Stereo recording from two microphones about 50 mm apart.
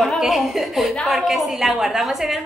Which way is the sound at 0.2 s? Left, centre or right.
Centre.